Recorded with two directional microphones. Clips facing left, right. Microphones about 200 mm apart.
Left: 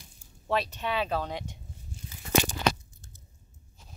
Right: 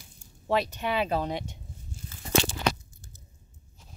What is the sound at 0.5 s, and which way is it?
Speech, 15° right (ahead or behind).